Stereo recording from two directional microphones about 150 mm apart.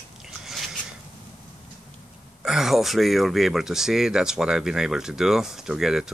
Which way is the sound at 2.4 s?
5° right (ahead or behind).